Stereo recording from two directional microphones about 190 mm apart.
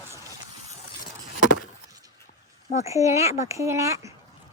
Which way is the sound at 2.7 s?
15° right (ahead or behind).